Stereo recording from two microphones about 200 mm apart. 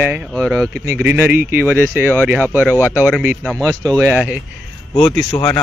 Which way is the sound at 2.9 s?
10° right (ahead or behind).